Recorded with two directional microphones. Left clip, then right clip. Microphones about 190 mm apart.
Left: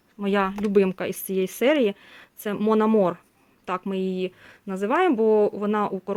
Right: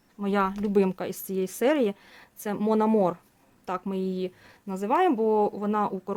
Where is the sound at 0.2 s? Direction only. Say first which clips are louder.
Left 3 dB; 10° left (ahead or behind).